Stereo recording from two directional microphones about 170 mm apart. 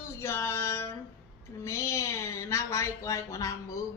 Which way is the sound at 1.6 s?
15° left (ahead or behind).